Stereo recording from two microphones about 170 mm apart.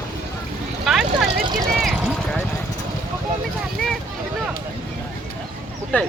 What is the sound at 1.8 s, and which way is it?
Clip-clop, centre (ahead or behind).